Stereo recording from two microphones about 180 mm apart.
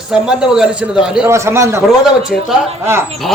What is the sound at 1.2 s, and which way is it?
Speech, 15° right (ahead or behind).